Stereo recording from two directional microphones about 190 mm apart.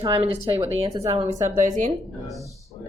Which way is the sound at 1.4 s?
40° right (ahead or behind).